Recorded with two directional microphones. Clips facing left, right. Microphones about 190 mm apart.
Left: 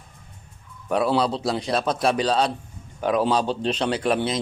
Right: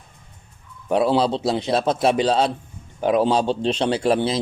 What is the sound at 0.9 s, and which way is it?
A man's voice, 25° right (ahead or behind).